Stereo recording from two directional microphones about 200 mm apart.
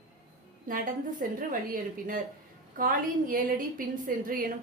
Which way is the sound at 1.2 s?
45° right (ahead or behind).